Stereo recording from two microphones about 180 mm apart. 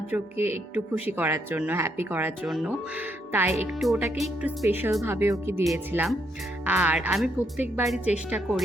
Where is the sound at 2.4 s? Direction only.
Centre (ahead or behind).